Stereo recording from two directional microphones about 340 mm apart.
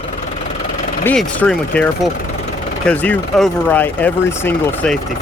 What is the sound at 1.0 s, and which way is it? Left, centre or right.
Speech, centre.